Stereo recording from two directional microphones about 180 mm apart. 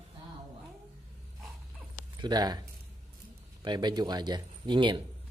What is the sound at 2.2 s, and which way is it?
Speech, 20° right (ahead or behind).